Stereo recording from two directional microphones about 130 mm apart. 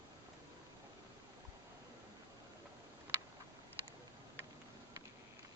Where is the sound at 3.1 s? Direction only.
15° right (ahead or behind).